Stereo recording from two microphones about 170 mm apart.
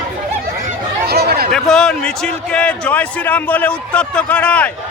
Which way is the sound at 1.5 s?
5° left (ahead or behind).